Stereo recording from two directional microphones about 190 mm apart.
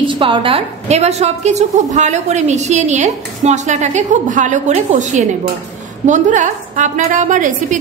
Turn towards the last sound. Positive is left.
turn(degrees=-40)  # may be behind; listen again after turning